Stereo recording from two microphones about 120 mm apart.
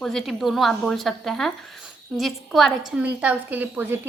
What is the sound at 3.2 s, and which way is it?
Speech, 15° right (ahead or behind).